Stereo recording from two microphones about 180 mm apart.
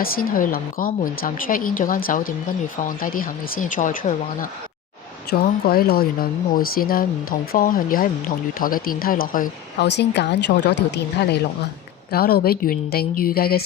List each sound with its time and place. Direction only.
0.0 s a woman's voice: 50° left (ahead or behind)
9.8 s a woman's voice: 75° left (ahead or behind); by 13.6 s 60° left (ahead or behind)